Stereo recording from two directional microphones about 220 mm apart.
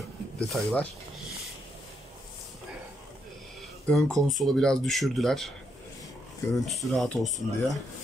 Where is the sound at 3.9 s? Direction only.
Centre (ahead or behind).